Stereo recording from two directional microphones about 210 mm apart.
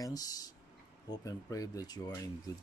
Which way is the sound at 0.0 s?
15° left (ahead or behind).